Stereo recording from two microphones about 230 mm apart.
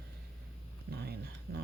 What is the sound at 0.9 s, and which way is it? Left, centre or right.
Speech, right.